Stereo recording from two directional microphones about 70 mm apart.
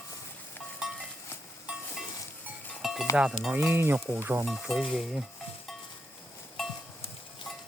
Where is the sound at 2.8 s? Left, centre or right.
Centre.